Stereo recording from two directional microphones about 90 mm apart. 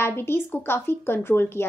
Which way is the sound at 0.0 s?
25° left (ahead or behind).